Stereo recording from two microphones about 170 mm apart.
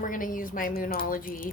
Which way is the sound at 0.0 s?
50° left (ahead or behind).